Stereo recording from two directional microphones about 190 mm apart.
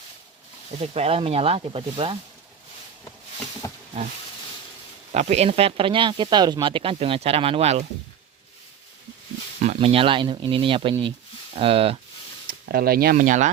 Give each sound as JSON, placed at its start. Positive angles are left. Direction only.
{"t": 0.8, "sound": "speech", "side_deg": -30}
{"t": 5.1, "sound": "speech", "side_deg": -35}
{"t": 9.7, "sound": "speech", "side_deg": -30}
{"t": 12.5, "sound": "speech", "side_deg": -50}